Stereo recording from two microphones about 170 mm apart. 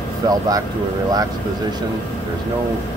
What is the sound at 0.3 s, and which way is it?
Speech, 20° right (ahead or behind).